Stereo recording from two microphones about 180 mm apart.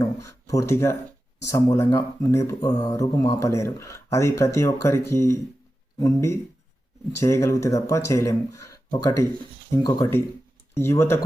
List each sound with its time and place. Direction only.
0.0 s speech: 15° left (ahead or behind)